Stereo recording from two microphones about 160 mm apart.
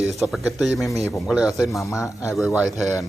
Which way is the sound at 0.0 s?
Centre (ahead or behind).